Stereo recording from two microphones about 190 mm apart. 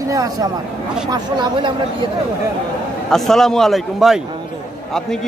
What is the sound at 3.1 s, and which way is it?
A man's voice, centre (ahead or behind).